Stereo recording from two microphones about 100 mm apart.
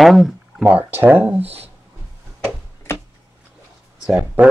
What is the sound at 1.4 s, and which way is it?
Speech, 90° right.